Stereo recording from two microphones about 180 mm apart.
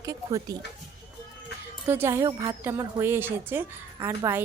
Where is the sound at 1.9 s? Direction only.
15° right (ahead or behind).